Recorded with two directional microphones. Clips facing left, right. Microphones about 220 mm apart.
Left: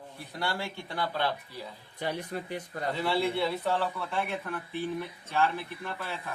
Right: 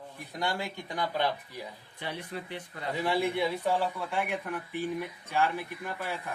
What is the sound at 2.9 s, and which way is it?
Speech, 15° right (ahead or behind).